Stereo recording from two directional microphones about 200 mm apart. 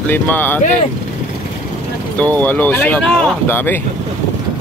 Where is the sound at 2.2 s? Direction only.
10° left (ahead or behind).